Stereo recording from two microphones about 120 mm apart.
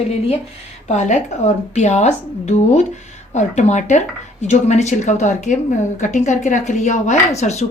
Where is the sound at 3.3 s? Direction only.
80° left.